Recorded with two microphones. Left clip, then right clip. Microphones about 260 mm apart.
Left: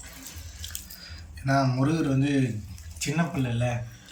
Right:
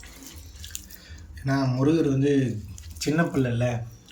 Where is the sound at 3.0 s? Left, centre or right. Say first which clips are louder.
Right 5 dB; centre.